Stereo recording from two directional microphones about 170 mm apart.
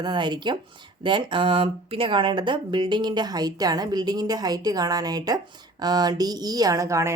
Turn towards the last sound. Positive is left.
turn(degrees=-15)  # may be behind; listen again after turning